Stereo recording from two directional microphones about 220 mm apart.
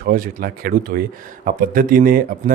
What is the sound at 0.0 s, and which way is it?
Speech, 40° right (ahead or behind).